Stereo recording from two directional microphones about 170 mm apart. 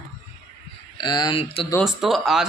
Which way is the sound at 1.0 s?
25° left (ahead or behind).